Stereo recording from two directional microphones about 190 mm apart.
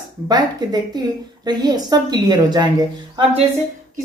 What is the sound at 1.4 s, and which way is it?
Speech, 20° right (ahead or behind).